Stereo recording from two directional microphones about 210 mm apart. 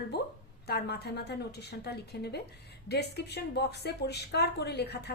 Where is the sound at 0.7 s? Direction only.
50° left (ahead or behind).